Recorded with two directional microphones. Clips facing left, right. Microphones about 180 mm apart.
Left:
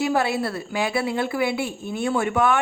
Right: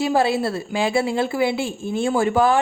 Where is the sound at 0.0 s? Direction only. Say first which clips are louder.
Right 3 dB; 25° right (ahead or behind).